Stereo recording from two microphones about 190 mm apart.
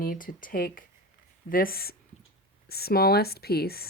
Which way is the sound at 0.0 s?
45° left (ahead or behind).